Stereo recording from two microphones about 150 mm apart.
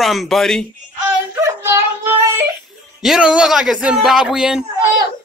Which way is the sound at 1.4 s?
20° right (ahead or behind).